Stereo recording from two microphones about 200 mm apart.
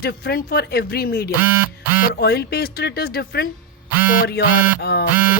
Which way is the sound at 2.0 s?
50° left (ahead or behind).